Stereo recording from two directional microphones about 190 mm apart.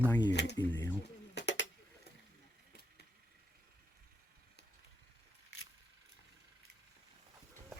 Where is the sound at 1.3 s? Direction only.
65° left (ahead or behind).